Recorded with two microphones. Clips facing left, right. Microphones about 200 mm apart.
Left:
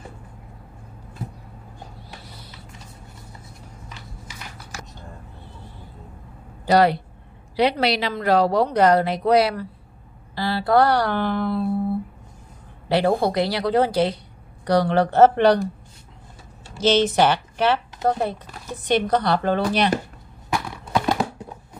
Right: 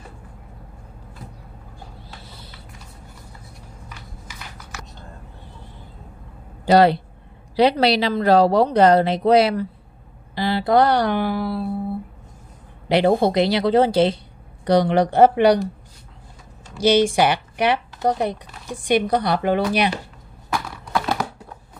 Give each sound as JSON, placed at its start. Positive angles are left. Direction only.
{"t": 4.3, "sound": "a sound", "side_deg": 30}
{"t": 6.6, "sound": "a woman's voice", "side_deg": -30}
{"t": 12.8, "sound": "a woman's voice", "side_deg": -20}
{"t": 16.7, "sound": "speech", "side_deg": -10}
{"t": 20.4, "sound": "horse", "side_deg": 5}
{"t": 20.9, "sound": "a sound", "side_deg": 20}